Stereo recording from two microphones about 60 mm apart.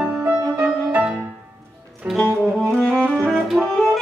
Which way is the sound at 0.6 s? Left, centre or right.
Right.